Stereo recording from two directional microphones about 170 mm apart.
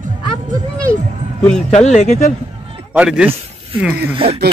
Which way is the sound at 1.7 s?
40° left (ahead or behind).